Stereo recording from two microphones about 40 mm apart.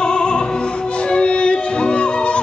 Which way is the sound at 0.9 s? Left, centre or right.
Left.